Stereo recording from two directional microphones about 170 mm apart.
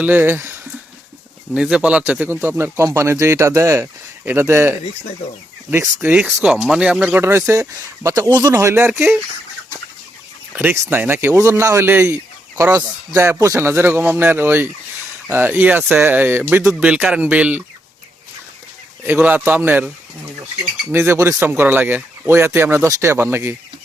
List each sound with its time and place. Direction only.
0.0 s speech: 10° right (ahead or behind)
6.0 s speech: 10° right (ahead or behind)
10.5 s speech: 10° right (ahead or behind)
19.0 s speech: 10° right (ahead or behind)